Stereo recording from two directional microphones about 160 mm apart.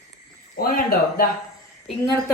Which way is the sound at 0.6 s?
65° left (ahead or behind).